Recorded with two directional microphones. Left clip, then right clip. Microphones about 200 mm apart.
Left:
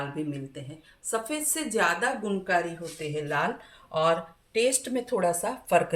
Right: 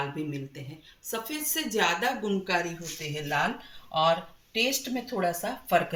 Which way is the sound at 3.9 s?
45° left (ahead or behind).